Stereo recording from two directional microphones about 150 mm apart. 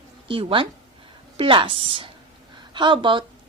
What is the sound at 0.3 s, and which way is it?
A woman's voice, 35° right (ahead or behind).